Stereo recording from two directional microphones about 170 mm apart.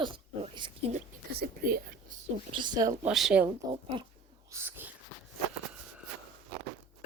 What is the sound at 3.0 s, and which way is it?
Speech, 5° right (ahead or behind).